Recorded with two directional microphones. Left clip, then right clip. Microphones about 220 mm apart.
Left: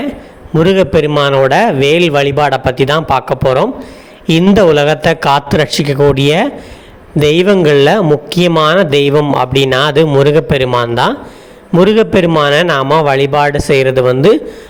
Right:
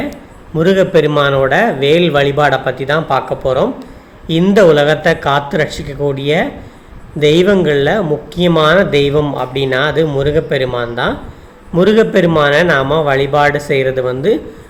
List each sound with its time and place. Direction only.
0.6 s a man's voice: 35° left (ahead or behind)